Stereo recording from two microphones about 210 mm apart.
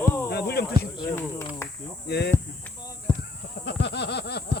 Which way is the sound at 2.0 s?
50° left (ahead or behind).